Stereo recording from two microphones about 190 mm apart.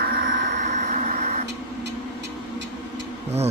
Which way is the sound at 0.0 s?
50° right (ahead or behind).